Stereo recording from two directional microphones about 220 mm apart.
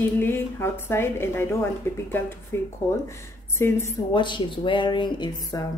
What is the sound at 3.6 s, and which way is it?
Speech, 10° left (ahead or behind).